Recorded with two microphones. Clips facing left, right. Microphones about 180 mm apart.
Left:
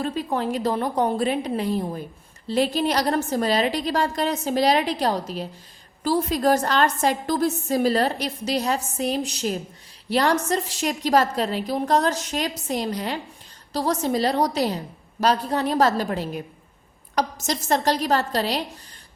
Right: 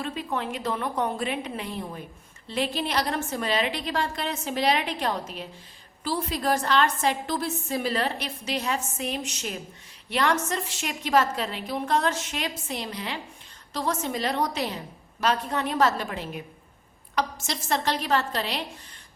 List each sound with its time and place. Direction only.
0.0 s a woman's voice: 40° left (ahead or behind)